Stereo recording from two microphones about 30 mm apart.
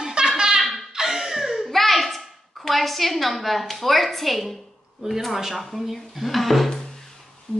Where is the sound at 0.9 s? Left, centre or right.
Centre.